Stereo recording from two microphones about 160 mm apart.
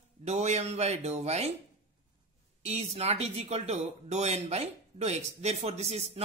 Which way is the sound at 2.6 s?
40° right (ahead or behind).